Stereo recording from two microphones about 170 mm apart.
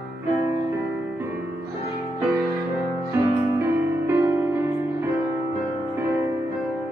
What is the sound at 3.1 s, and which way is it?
Music, 15° right (ahead or behind).